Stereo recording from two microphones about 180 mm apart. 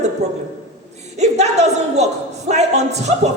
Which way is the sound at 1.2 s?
40° right (ahead or behind).